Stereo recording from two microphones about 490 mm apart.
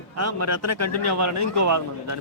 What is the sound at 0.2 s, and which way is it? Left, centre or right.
A man's voice, right.